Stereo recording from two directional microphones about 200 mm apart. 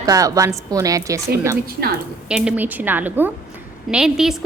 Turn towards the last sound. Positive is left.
turn(degrees=0)  # may be behind; listen again after turning